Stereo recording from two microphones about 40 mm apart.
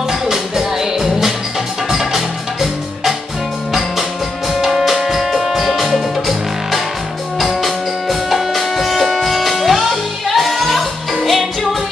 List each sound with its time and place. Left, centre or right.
0.3 s music: centre
4.6 s music: centre